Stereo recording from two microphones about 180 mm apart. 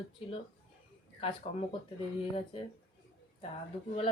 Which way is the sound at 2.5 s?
30° left (ahead or behind).